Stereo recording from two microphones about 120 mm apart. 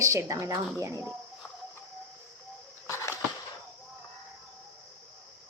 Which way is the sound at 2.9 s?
25° left (ahead or behind).